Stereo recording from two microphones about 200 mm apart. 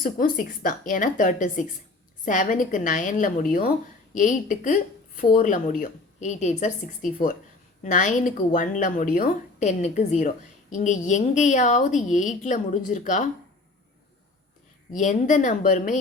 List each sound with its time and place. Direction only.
0.0 s a woman's voice: 45° left (ahead or behind)
14.9 s a woman's voice: 35° left (ahead or behind)